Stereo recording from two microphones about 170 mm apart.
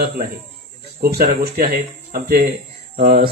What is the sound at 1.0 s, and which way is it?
Speech, 65° right (ahead or behind).